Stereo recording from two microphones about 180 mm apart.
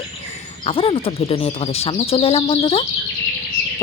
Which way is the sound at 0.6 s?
30° left (ahead or behind).